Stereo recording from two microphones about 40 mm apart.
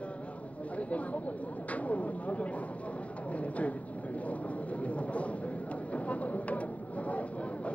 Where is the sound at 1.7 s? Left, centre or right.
Left.